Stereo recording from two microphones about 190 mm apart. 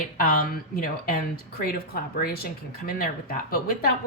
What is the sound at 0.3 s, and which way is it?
Speech, 50° left (ahead or behind).